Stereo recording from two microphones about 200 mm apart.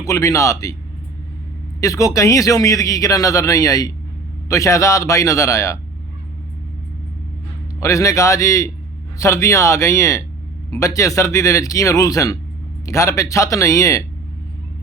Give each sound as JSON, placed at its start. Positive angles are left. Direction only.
{"t": 0.0, "sound": "speech", "side_deg": 15}
{"t": 1.8, "sound": "speech", "side_deg": 15}
{"t": 7.8, "sound": "speech", "side_deg": 15}